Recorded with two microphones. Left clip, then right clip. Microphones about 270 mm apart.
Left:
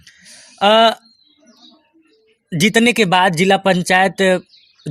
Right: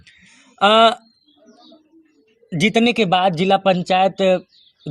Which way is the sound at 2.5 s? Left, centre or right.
Left.